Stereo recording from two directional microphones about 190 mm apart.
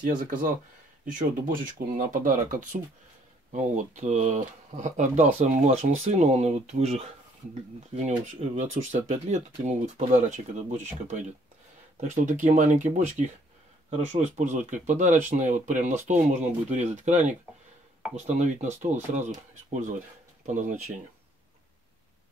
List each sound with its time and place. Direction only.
0.0 s speech: 45° right (ahead or behind)